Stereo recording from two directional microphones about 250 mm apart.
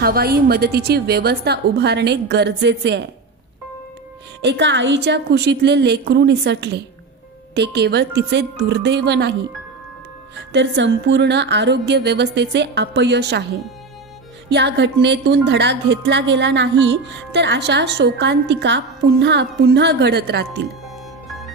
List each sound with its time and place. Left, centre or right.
0.0 s a woman's voice: right
4.4 s a woman's voice: right
10.5 s a woman's voice: right
14.5 s a woman's voice: right